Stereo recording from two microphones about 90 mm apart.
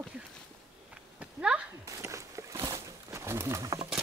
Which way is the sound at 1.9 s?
35° right (ahead or behind).